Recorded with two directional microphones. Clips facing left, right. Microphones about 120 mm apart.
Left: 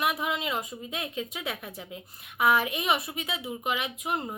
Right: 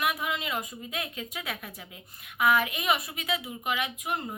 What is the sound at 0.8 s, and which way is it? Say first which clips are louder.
A child's voice: left 2 dB; 25° left (ahead or behind).